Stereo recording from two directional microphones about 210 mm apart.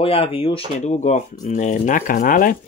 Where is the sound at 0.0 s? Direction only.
25° left (ahead or behind).